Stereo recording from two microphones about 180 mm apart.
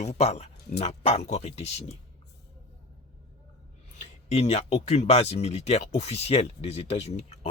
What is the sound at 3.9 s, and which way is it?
Speech, 35° left (ahead or behind).